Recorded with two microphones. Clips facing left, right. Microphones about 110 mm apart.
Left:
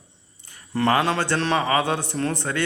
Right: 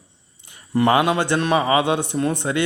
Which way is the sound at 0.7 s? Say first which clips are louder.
Right 4 dB; 15° right (ahead or behind).